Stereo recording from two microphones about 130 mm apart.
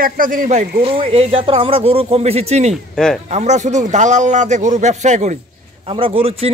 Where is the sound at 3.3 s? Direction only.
60° right (ahead or behind).